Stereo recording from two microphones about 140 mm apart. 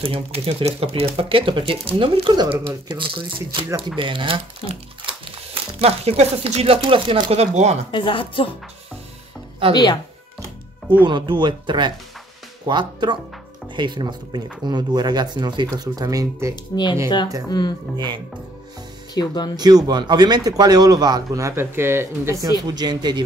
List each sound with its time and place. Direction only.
0.0 s speech: 45° right (ahead or behind)
7.9 s speech: 35° left (ahead or behind)
9.6 s speech: 40° right (ahead or behind)
11.1 s speech: 35° right (ahead or behind)
17.5 s speech: 30° left (ahead or behind)
17.9 s speech: 30° right (ahead or behind)
19.1 s speech: 30° left (ahead or behind)
19.5 s speech: 30° right (ahead or behind)